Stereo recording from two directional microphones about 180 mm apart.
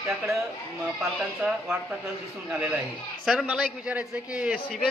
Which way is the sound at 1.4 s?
5° right (ahead or behind).